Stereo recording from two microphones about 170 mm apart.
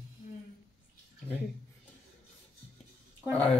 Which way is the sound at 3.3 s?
10° left (ahead or behind).